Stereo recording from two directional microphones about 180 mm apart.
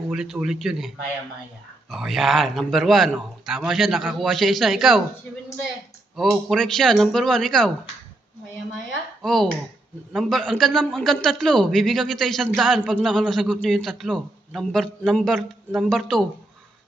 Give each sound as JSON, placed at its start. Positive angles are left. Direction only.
{"t": 0.1, "sound": "a man's voice", "side_deg": -5}
{"t": 9.2, "sound": "a man's voice", "side_deg": 0}